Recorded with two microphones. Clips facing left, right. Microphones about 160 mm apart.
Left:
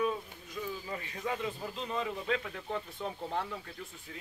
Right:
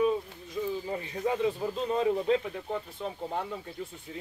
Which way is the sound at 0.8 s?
30° right (ahead or behind).